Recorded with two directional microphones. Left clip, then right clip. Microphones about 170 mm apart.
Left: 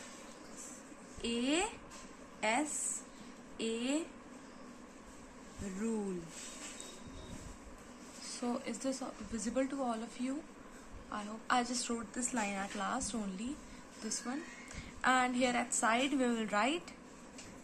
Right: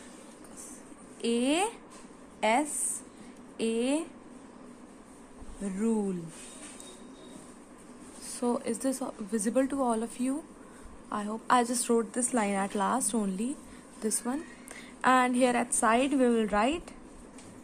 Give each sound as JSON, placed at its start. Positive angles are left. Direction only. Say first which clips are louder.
{"t": 1.2, "sound": "a woman's voice", "louder": "right 7 dB", "side_deg": -40}
{"t": 8.3, "sound": "a woman's voice", "louder": "right 9 dB", "side_deg": -45}